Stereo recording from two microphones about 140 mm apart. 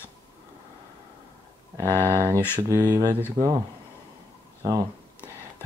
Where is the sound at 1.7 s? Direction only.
20° right (ahead or behind).